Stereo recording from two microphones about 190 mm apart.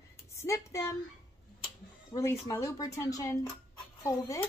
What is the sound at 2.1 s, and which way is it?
A woman's voice, 25° left (ahead or behind).